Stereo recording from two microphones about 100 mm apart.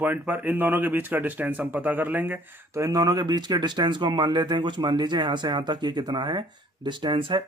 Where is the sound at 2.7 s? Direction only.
35° right (ahead or behind); by 7.4 s 55° right (ahead or behind).